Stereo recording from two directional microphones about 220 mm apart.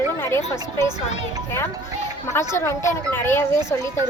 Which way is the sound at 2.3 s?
10° left (ahead or behind).